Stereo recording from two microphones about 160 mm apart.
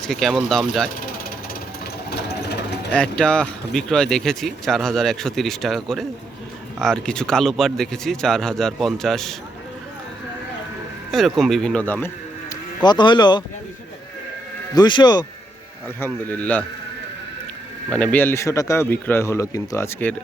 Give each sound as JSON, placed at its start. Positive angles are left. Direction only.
{"t": 0.0, "sound": "speech", "side_deg": 0}
{"t": 2.9, "sound": "speech", "side_deg": 5}
{"t": 11.1, "sound": "speech", "side_deg": 0}
{"t": 12.8, "sound": "speech", "side_deg": 30}
{"t": 14.8, "sound": "speech", "side_deg": 30}
{"t": 16.0, "sound": "a man's voice", "side_deg": 10}
{"t": 17.9, "sound": "a man's voice", "side_deg": 10}